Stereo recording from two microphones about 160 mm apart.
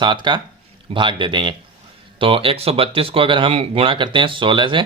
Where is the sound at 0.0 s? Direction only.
30° right (ahead or behind).